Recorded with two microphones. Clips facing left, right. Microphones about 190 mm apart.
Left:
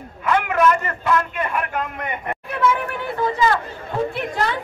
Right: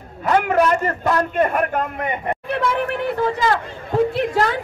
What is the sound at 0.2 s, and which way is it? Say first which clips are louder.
A man's voice: right 2 dB; 40° right (ahead or behind).